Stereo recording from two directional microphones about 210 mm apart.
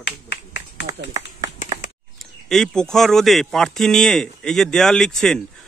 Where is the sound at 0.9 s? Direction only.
15° right (ahead or behind).